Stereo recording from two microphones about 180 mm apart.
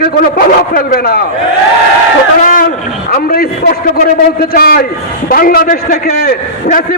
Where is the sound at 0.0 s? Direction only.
55° left (ahead or behind).